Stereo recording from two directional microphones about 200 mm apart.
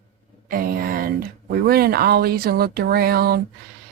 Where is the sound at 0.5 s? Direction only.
45° right (ahead or behind).